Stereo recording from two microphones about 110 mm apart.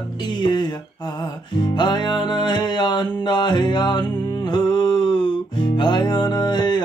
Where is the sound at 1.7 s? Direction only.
45° left (ahead or behind).